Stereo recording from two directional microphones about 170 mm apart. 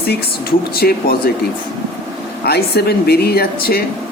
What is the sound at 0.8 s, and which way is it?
Speech, 65° left (ahead or behind).